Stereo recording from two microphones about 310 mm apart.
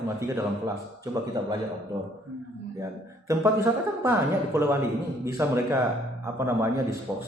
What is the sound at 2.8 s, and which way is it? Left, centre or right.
Speech, centre.